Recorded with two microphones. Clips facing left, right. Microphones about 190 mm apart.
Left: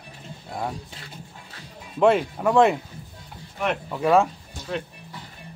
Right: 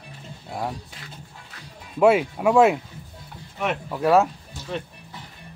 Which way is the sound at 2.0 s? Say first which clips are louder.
Right 1 dB; 5° right (ahead or behind).